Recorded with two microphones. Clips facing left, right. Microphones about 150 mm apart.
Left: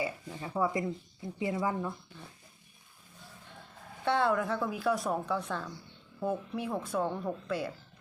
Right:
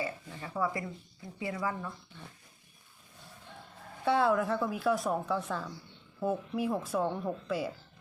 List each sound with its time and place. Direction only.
0.0 s speech: 15° left (ahead or behind)
4.0 s speech: 5° right (ahead or behind)